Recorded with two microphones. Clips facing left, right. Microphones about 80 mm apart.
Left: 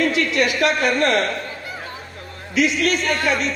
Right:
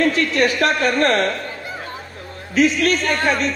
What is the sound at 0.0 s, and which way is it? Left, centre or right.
A man's voice, right.